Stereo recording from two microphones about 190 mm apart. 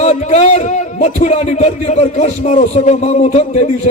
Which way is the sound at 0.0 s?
35° left (ahead or behind).